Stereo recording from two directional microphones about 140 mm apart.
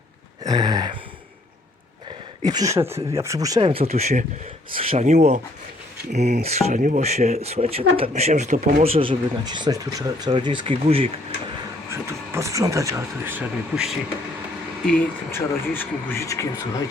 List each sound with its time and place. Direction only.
0.4 s a sound: 30° right (ahead or behind)
2.4 s speech: 25° right (ahead or behind)
3.6 s speech: 40° right (ahead or behind)
5.0 s speech: 55° right (ahead or behind); by 11.1 s 40° right (ahead or behind)
11.9 s speech: 20° right (ahead or behind)
14.8 s speech: 15° left (ahead or behind)